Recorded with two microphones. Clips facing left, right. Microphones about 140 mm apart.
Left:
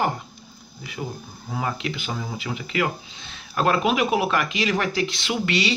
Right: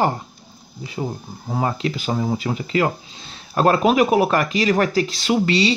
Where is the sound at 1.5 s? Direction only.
35° right (ahead or behind).